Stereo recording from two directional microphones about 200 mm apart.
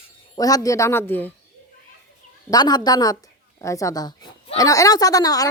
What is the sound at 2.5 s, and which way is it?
A woman's voice, 20° left (ahead or behind).